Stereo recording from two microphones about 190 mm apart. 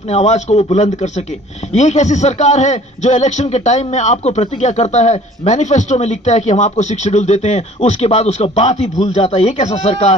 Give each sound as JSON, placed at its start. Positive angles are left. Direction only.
{"t": 0.1, "sound": "a man's voice", "side_deg": 35}